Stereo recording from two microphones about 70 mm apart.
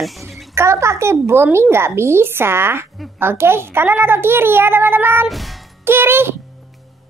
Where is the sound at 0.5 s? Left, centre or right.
Right.